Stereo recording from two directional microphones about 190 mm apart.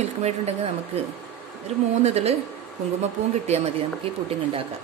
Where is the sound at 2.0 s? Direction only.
35° right (ahead or behind).